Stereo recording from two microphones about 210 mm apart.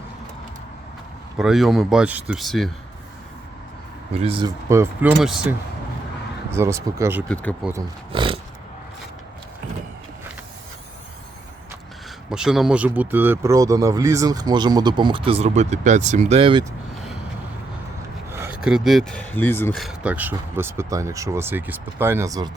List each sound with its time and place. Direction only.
1.4 s speech: centre (ahead or behind)
4.1 s speech: 25° right (ahead or behind)
5.2 s speech: centre (ahead or behind)
6.5 s speech: 10° right (ahead or behind)
8.1 s a sound: 25° right (ahead or behind)
12.3 s speech: 5° right (ahead or behind); by 16.6 s 25° right (ahead or behind)
18.3 s speech: 10° right (ahead or behind); by 19.8 s 10° left (ahead or behind)
19.8 s speech: 5° right (ahead or behind)